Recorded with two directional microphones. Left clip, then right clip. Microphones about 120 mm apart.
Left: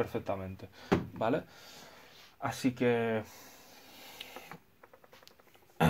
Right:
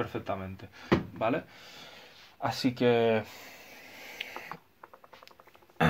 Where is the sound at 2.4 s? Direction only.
25° right (ahead or behind).